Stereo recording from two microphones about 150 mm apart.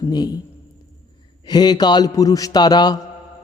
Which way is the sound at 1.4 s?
30° left (ahead or behind).